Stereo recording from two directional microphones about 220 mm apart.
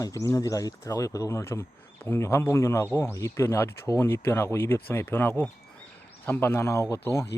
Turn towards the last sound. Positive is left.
turn(degrees=15)  # may be behind; listen again after turning